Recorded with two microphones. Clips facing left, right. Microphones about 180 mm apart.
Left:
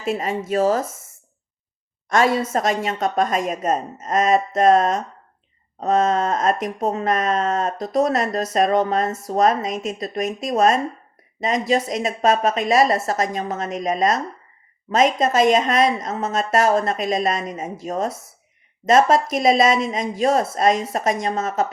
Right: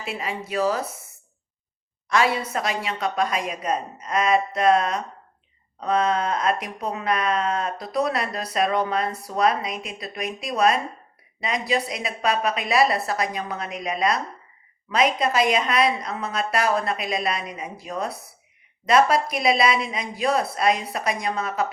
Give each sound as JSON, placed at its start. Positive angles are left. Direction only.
{"t": 0.0, "sound": "speech", "side_deg": 45}
{"t": 2.0, "sound": "a woman's voice", "side_deg": 45}